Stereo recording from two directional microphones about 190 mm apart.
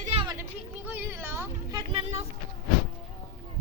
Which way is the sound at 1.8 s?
30° right (ahead or behind).